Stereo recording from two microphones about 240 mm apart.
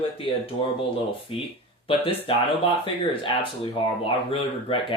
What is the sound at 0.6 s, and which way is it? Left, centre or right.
Speech, left.